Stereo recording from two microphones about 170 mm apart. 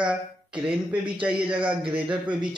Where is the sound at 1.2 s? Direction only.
5° right (ahead or behind).